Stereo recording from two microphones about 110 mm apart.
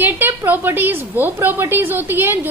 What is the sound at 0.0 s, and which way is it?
A woman's voice, 15° right (ahead or behind).